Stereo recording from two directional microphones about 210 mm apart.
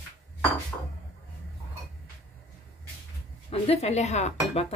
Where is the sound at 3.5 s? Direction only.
30° left (ahead or behind).